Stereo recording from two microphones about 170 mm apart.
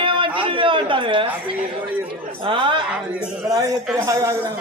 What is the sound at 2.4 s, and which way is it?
Speech, 30° right (ahead or behind).